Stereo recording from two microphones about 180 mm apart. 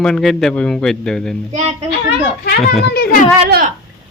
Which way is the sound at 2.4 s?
65° left (ahead or behind).